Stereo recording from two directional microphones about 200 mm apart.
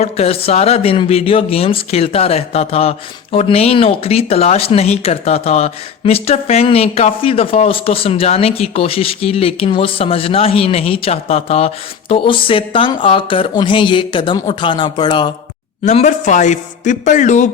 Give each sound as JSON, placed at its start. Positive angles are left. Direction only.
{"t": 0.0, "sound": "speech", "side_deg": 30}
{"t": 15.8, "sound": "a man's voice", "side_deg": 35}